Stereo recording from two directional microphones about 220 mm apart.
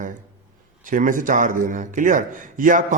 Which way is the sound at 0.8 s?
35° right (ahead or behind).